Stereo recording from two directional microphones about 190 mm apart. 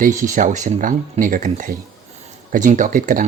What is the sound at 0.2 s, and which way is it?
Speech, 45° right (ahead or behind).